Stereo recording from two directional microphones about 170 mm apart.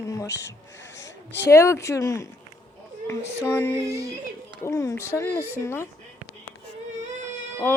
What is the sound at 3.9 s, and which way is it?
Speech, 20° right (ahead or behind).